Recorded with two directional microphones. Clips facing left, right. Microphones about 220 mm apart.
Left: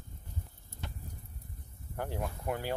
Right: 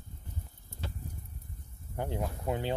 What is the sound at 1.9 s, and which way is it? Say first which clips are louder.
Speech: right 2 dB; 20° right (ahead or behind).